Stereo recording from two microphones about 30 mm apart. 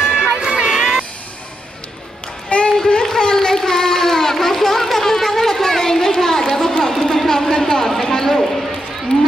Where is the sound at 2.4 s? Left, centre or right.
Left.